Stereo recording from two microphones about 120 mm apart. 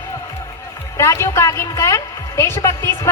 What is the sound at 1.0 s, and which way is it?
A woman's voice, 25° left (ahead or behind).